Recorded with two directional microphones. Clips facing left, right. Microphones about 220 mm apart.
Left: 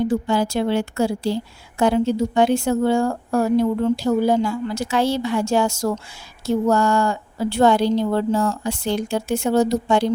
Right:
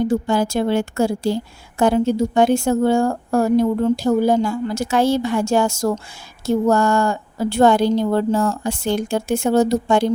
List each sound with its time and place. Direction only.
0.0 s speech: 45° right (ahead or behind)